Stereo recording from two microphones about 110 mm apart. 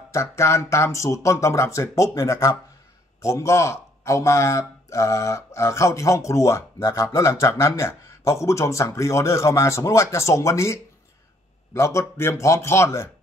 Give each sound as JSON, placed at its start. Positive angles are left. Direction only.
{"t": 0.1, "sound": "a man's voice", "side_deg": 25}